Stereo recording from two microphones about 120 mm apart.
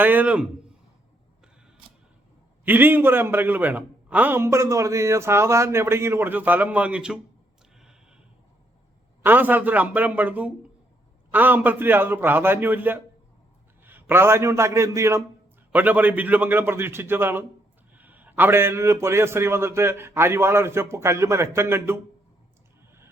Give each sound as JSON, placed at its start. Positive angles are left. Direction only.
{"t": 0.0, "sound": "a man's voice", "side_deg": -15}
{"t": 2.6, "sound": "a man's voice", "side_deg": -15}
{"t": 7.8, "sound": "a sound", "side_deg": -5}
{"t": 9.2, "sound": "a man's voice", "side_deg": -15}
{"t": 15.7, "sound": "a man's voice", "side_deg": -15}